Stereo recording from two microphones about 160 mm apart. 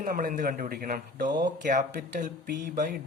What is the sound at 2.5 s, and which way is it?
Mantra, 90° right.